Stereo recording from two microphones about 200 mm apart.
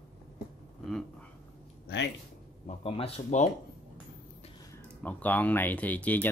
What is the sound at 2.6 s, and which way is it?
Speech, 30° left (ahead or behind).